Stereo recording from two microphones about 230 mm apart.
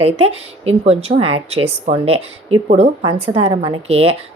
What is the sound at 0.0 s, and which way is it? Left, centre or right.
Speech, right.